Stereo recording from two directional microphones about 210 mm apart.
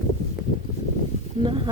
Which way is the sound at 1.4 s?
25° right (ahead or behind).